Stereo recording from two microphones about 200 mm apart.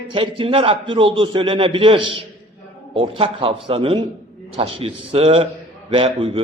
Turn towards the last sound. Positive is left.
turn(degrees=-25)  # may be behind; listen again after turning